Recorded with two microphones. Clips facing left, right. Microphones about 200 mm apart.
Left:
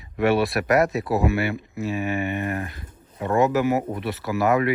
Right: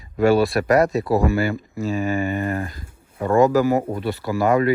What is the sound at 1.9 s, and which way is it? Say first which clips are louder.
Speech: right 4 dB; 30° right (ahead or behind).